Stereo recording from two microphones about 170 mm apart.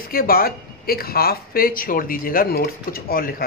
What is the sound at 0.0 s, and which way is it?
Speech, 60° left (ahead or behind).